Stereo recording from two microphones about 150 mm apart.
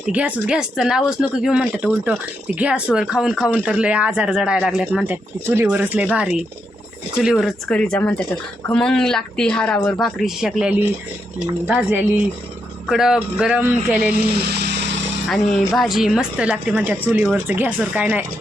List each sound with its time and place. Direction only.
0.0 s speech: 10° right (ahead or behind)
14.4 s vehicle: 90° right
15.3 s speech: centre (ahead or behind)